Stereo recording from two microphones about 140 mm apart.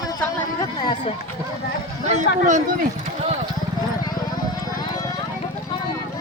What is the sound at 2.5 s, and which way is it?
Speech, 60° right (ahead or behind).